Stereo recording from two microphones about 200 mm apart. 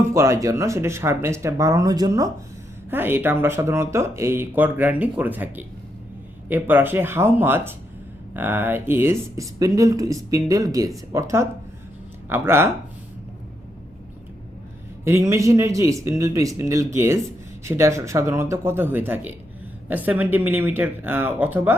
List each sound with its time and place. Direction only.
0.1 s speech: 15° right (ahead or behind)
15.0 s speech: 15° right (ahead or behind)